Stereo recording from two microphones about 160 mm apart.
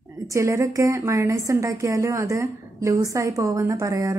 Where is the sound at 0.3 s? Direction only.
20° right (ahead or behind).